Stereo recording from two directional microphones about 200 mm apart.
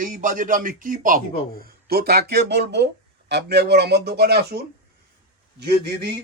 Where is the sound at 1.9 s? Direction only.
50° right (ahead or behind).